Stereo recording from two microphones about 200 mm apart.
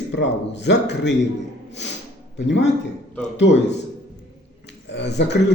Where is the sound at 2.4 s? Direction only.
60° left (ahead or behind).